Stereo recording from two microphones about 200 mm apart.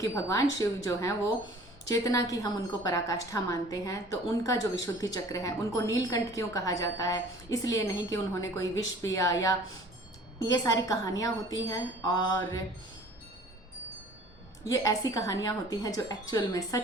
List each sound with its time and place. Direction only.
0.0 s a woman's voice: 15° left (ahead or behind)
14.7 s a woman's voice: 20° left (ahead or behind)